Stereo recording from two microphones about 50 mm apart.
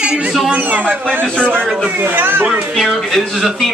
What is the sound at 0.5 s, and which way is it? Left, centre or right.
Speech, right.